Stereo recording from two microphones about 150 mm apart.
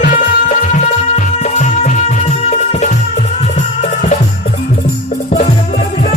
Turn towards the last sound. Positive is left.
turn(degrees=50)  # may be behind; listen again after turning